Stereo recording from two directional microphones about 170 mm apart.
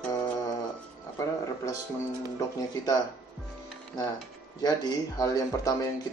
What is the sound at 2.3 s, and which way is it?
Speech, 20° left (ahead or behind).